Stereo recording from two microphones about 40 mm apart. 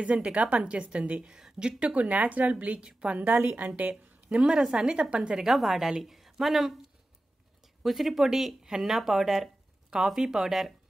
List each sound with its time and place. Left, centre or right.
0.0 s a woman's voice: right
2.0 s a woman's voice: right
4.2 s a sound: right
4.5 s speech: centre
5.1 s speech: right
5.4 s a woman's voice: centre